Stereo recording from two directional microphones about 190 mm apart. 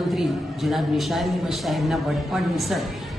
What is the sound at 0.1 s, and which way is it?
A man's voice, centre (ahead or behind).